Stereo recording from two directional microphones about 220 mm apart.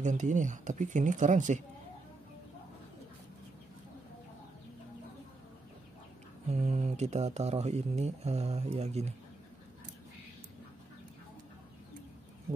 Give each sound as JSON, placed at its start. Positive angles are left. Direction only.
{"t": 0.0, "sound": "speech", "side_deg": -35}
{"t": 6.5, "sound": "speech", "side_deg": -30}